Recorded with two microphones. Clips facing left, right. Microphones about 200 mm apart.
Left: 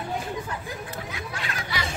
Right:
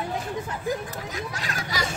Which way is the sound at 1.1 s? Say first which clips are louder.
Right 2 dB; 40° right (ahead or behind).